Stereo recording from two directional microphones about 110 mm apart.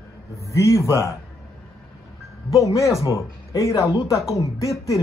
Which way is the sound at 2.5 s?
30° left (ahead or behind).